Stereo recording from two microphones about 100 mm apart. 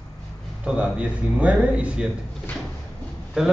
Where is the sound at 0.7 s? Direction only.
10° right (ahead or behind).